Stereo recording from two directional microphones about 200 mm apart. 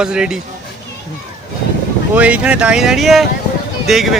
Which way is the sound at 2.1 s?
5° right (ahead or behind).